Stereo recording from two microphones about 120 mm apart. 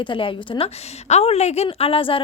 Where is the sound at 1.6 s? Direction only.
50° left (ahead or behind).